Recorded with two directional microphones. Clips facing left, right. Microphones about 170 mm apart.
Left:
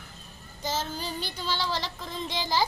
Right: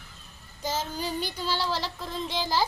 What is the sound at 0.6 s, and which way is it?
A woman's voice, 10° right (ahead or behind).